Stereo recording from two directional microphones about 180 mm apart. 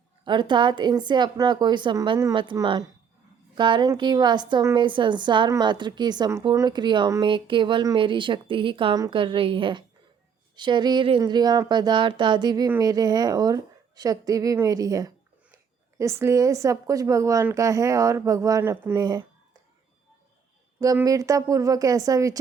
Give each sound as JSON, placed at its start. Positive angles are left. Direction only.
{"t": 0.3, "sound": "a woman's voice", "side_deg": -25}
{"t": 20.8, "sound": "a woman's voice", "side_deg": -20}